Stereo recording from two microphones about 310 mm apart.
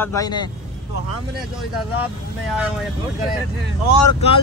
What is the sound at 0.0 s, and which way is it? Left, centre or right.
Speech, centre.